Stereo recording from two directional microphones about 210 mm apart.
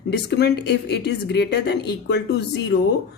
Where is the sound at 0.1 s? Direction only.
55° left (ahead or behind).